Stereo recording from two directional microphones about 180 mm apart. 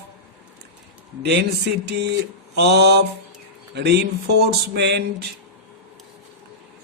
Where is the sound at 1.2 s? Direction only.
70° right (ahead or behind).